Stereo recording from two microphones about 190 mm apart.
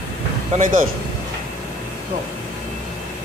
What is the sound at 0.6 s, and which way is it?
Speech, 45° right (ahead or behind).